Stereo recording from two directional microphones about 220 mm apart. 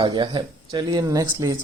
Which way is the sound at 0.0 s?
20° right (ahead or behind).